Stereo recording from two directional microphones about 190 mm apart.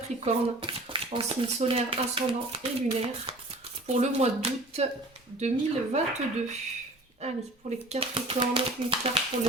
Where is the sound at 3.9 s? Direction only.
35° right (ahead or behind).